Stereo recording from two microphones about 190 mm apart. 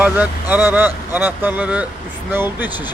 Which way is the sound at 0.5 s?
10° right (ahead or behind).